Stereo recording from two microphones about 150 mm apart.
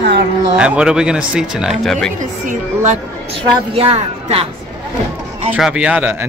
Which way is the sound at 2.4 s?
55° right (ahead or behind).